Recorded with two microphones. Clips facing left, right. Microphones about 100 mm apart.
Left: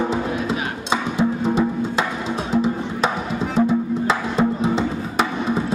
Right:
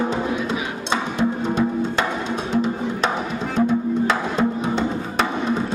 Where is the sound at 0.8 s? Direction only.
5° left (ahead or behind).